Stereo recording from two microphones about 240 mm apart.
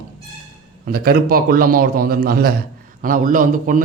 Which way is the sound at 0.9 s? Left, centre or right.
Right.